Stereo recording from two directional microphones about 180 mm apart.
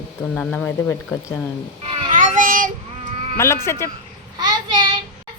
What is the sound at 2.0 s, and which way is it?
Child singing, 45° right (ahead or behind).